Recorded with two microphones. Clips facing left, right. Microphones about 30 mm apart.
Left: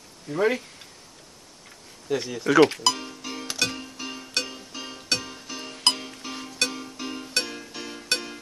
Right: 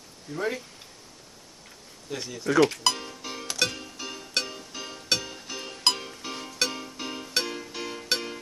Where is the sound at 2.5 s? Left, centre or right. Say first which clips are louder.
Left 4 dB; left.